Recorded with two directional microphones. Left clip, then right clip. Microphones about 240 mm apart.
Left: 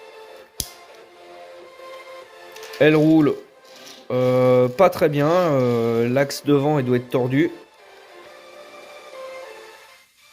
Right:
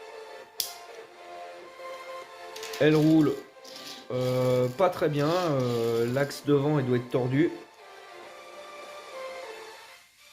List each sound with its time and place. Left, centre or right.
2.7 s speech: left